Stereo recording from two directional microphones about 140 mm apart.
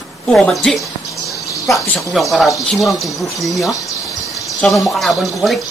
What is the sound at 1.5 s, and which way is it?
Cricket, 25° left (ahead or behind).